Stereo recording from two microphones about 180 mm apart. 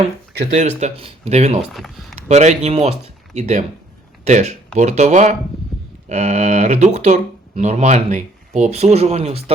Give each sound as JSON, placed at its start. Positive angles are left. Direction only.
{"t": 0.5, "sound": "speech", "side_deg": -40}